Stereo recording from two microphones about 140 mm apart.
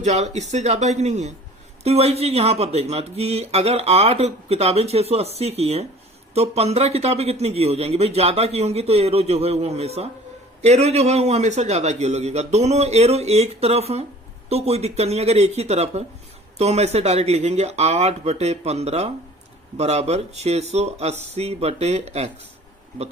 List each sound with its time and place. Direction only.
0.0 s a man's voice: 55° right (ahead or behind)